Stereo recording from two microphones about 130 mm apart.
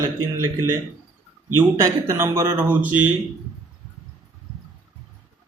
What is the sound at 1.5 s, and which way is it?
A man's voice, 20° right (ahead or behind).